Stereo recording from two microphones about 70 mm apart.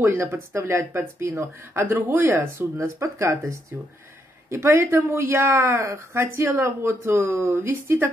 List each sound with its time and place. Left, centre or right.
0.0 s speech: right